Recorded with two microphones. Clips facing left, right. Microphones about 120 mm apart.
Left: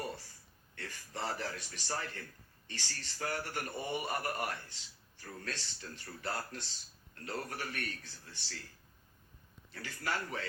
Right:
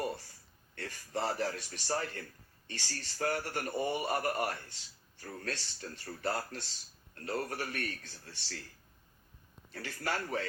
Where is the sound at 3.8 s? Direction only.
30° right (ahead or behind).